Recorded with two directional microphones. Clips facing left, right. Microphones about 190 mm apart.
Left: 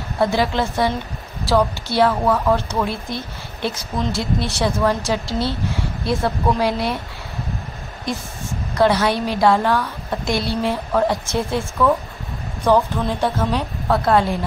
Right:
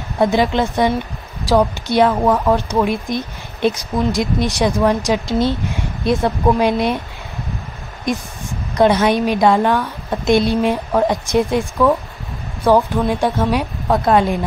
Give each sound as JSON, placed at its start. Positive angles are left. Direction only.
{"t": 0.2, "sound": "speech", "side_deg": -20}
{"t": 8.0, "sound": "speech", "side_deg": -15}